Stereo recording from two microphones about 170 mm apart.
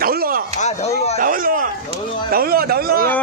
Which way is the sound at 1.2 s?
55° right (ahead or behind).